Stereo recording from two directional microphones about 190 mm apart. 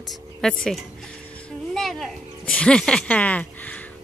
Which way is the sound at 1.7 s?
Centre (ahead or behind).